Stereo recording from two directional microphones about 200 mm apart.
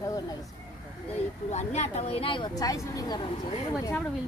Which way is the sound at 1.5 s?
35° left (ahead or behind).